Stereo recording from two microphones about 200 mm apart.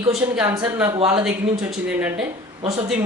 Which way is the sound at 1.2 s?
5° right (ahead or behind).